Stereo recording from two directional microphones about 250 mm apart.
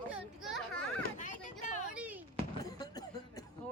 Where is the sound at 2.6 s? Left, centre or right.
Centre.